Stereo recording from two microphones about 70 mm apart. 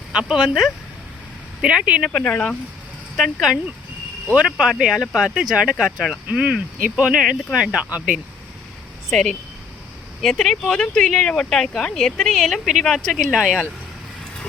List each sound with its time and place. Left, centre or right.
0.1 s speech: centre
1.6 s speech: centre
2.0 s speech: centre
4.4 s speech: centre
9.0 s speech: centre